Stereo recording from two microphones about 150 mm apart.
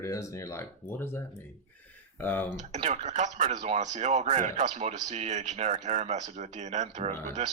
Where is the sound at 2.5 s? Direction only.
55° right (ahead or behind).